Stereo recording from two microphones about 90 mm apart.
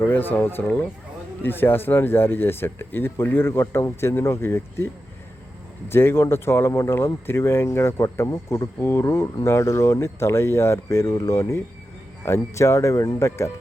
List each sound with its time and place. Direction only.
0.0 s speech: 20° left (ahead or behind)
5.9 s speech: 25° left (ahead or behind)